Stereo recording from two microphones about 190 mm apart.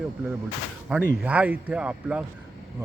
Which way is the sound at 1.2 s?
5° right (ahead or behind).